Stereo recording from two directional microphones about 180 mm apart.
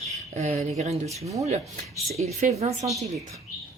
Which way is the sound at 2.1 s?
35° right (ahead or behind).